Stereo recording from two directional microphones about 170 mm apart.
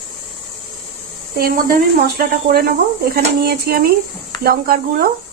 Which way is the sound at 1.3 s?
60° right (ahead or behind).